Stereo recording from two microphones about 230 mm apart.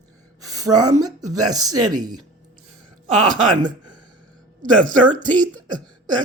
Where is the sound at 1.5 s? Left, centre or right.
Centre.